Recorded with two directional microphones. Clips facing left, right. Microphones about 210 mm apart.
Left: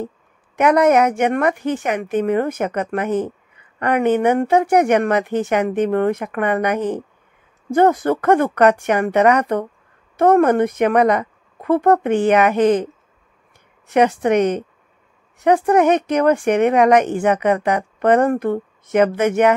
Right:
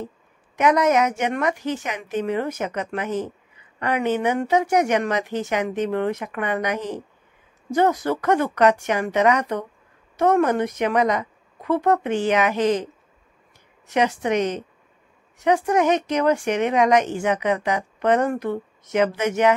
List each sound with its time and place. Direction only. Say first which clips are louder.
0.6 s a woman's voice: left 5 dB; 55° left (ahead or behind)